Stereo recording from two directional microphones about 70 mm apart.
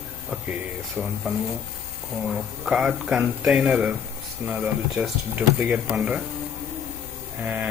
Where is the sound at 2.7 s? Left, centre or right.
Centre.